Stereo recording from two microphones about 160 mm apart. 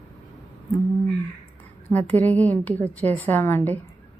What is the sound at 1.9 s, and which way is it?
A woman's voice, 10° left (ahead or behind).